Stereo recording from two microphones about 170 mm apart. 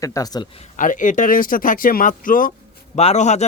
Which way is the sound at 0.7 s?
50° left (ahead or behind).